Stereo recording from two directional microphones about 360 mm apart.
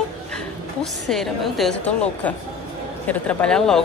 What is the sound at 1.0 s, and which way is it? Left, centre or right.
A woman's voice, centre.